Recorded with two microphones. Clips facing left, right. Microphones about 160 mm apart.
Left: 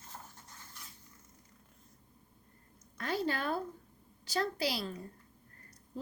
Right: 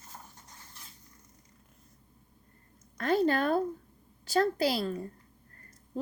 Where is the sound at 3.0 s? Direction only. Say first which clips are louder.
Right 8 dB; 50° right (ahead or behind).